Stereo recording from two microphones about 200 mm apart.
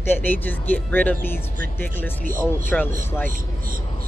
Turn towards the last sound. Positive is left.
turn(degrees=-40)  # may be behind; listen again after turning